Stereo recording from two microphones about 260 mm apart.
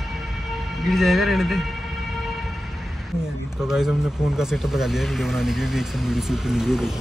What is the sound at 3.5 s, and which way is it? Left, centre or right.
Speech, centre.